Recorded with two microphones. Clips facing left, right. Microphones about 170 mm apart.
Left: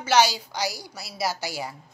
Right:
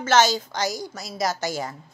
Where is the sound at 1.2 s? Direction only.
10° left (ahead or behind).